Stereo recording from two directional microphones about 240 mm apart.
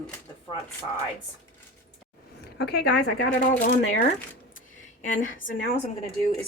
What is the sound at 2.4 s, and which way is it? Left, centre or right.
Speech, left.